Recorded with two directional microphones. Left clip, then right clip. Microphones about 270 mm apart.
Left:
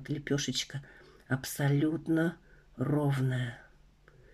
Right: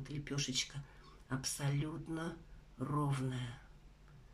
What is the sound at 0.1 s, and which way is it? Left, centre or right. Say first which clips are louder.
Speech: left 7 dB; left.